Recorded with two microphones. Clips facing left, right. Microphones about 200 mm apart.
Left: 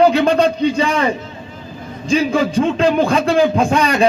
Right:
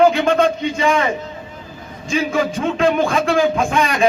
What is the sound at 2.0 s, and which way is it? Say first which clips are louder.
Speech: left 3 dB; 35° left (ahead or behind).